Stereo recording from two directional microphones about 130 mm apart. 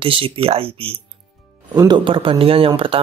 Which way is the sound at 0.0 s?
45° right (ahead or behind).